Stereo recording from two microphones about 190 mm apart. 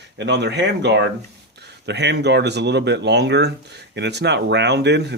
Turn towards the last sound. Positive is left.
turn(degrees=-65)  # may be behind; listen again after turning